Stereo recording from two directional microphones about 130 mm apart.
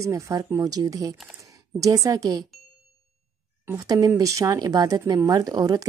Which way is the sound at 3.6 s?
25° right (ahead or behind).